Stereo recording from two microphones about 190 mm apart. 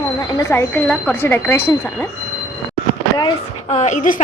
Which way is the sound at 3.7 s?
40° left (ahead or behind).